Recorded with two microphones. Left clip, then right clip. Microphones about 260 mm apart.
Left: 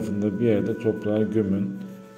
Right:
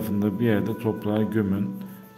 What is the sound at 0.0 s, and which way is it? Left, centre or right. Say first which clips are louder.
Speech: left 1 dB; centre.